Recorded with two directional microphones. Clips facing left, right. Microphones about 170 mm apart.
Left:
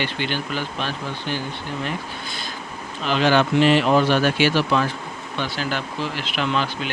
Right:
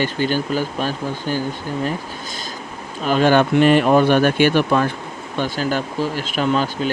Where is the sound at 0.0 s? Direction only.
40° right (ahead or behind).